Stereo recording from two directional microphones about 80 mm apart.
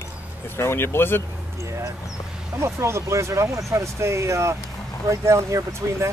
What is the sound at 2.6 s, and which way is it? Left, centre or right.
Speech, right.